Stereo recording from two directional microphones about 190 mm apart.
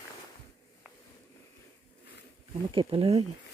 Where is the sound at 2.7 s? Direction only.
25° right (ahead or behind).